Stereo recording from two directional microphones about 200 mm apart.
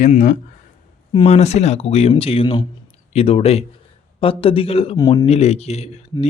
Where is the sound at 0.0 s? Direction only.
35° left (ahead or behind).